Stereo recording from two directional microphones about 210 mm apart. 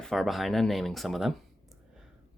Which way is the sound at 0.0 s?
Centre (ahead or behind).